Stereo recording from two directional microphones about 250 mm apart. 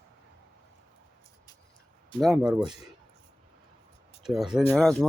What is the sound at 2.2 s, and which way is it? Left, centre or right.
Speech, centre.